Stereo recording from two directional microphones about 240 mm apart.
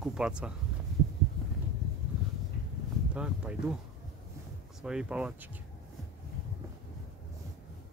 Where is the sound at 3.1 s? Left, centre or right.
Centre.